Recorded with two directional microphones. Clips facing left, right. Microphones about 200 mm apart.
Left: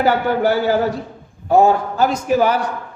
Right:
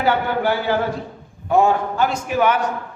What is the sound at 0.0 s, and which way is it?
Speech, 40° left (ahead or behind).